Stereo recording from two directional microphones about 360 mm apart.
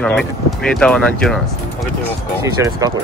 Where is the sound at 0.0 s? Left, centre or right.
Centre.